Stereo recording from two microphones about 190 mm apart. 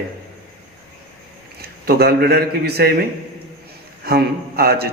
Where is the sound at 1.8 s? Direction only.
55° right (ahead or behind).